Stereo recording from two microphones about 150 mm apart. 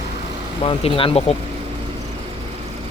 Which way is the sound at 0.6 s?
35° left (ahead or behind).